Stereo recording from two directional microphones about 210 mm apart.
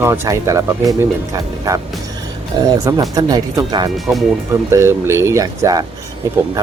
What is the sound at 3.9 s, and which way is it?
Speech, centre (ahead or behind).